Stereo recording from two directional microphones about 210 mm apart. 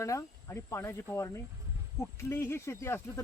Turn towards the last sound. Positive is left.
turn(degrees=10)  # may be behind; listen again after turning